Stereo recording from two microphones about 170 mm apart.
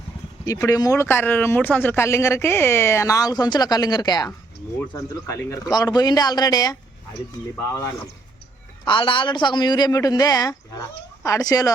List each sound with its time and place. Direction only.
0.4 s a man's voice: 20° left (ahead or behind)
8.8 s a man's voice: 30° left (ahead or behind)